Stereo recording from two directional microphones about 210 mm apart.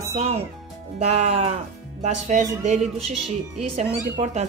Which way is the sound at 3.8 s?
30° right (ahead or behind).